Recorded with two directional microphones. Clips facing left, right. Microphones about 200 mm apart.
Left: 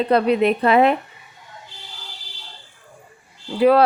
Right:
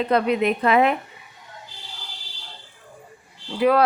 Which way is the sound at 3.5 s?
30° left (ahead or behind).